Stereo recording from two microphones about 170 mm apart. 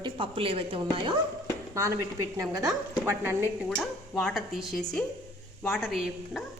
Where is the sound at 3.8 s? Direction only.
Centre (ahead or behind).